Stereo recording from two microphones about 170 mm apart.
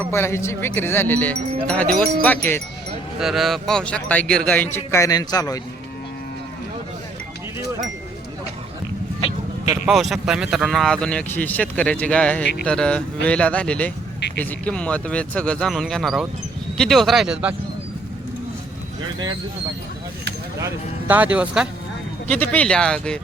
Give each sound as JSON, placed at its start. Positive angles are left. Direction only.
{"t": 0.1, "sound": "speech", "side_deg": 15}
{"t": 3.2, "sound": "speech", "side_deg": 0}
{"t": 9.8, "sound": "speech", "side_deg": 0}
{"t": 20.6, "sound": "speech", "side_deg": -15}
{"t": 22.3, "sound": "speech", "side_deg": 10}